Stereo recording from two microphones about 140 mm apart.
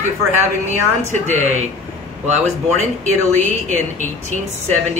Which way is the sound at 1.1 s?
60° right (ahead or behind).